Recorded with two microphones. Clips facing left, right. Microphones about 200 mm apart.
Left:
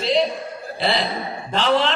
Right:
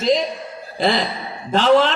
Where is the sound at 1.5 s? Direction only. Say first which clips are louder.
Right 5 dB; 45° right (ahead or behind).